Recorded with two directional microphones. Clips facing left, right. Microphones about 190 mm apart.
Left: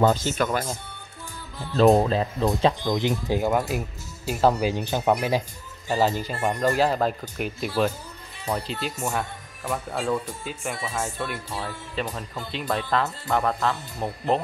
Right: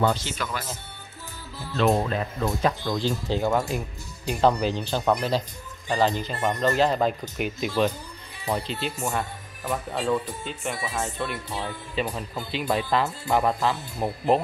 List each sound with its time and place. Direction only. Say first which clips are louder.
0.0 s speech: left 4 dB; 45° left (ahead or behind)
2.0 s speech: left 4 dB; 25° left (ahead or behind)
2.8 s speech: left 2 dB; 20° left (ahead or behind)
3.5 s speech: left 1 dB; 5° left (ahead or behind)